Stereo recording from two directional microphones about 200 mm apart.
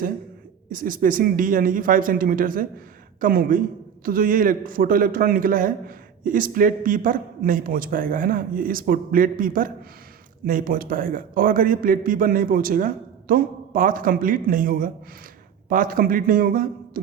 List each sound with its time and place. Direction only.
0.7 s a man's voice: 45° right (ahead or behind)